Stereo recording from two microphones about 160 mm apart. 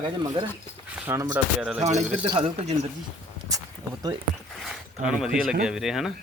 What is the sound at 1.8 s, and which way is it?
Speech, 45° right (ahead or behind).